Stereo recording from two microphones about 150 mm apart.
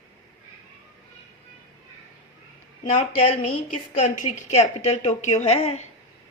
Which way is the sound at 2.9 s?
50° left (ahead or behind).